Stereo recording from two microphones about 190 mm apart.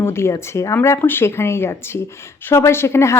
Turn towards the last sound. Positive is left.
turn(degrees=15)  # may be behind; listen again after turning